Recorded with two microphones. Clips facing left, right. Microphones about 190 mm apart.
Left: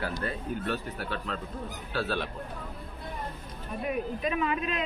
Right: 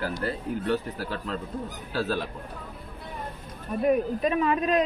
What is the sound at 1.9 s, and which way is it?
Speech, 40° right (ahead or behind).